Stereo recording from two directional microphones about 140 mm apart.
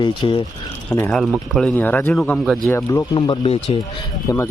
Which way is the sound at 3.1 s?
40° left (ahead or behind).